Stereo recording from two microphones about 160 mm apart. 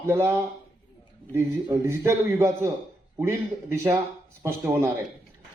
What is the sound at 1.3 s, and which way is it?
Speech, 15° right (ahead or behind).